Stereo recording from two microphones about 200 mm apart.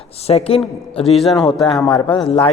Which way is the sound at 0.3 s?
30° left (ahead or behind).